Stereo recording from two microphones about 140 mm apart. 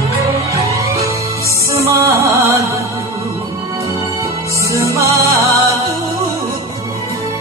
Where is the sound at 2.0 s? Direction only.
20° right (ahead or behind).